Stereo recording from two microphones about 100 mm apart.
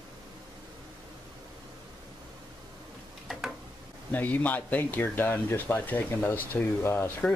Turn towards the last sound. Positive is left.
turn(degrees=20)  # may be behind; listen again after turning